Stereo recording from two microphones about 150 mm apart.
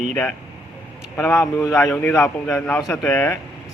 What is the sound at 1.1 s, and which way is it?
A man's voice, 20° left (ahead or behind).